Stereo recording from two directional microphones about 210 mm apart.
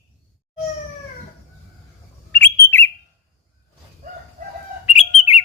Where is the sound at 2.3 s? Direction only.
10° left (ahead or behind).